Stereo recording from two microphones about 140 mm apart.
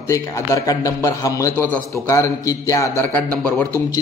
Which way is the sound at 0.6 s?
25° left (ahead or behind).